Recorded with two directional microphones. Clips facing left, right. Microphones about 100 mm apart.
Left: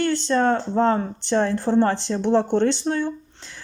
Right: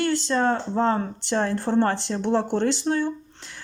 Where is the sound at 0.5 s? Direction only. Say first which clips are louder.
Left 3 dB; 35° left (ahead or behind).